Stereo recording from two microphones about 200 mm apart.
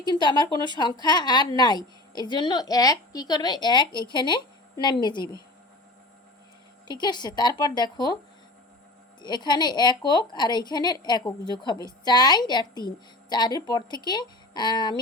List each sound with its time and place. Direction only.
0.0 s a woman's voice: 20° left (ahead or behind)
6.8 s a woman's voice: 20° left (ahead or behind)
9.2 s a woman's voice: 20° left (ahead or behind)